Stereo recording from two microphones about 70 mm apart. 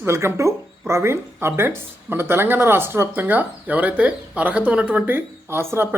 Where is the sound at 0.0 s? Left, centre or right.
Right.